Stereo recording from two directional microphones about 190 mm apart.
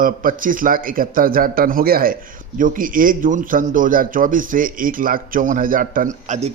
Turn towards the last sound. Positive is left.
turn(degrees=-35)  # may be behind; listen again after turning